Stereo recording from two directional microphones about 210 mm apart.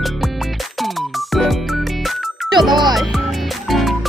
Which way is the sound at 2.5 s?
20° right (ahead or behind).